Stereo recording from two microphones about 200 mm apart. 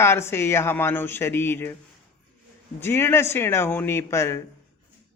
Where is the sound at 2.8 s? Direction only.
10° left (ahead or behind).